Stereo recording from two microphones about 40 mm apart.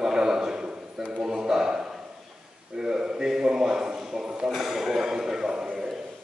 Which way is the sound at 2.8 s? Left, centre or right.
Centre.